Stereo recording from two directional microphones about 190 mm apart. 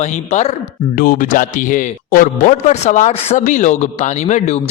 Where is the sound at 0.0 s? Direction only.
35° left (ahead or behind).